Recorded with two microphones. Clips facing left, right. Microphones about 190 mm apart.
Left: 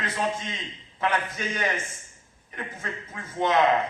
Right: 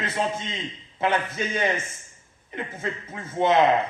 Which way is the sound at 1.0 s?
25° right (ahead or behind).